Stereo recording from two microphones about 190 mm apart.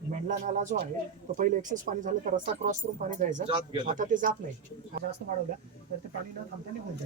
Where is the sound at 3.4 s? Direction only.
25° right (ahead or behind).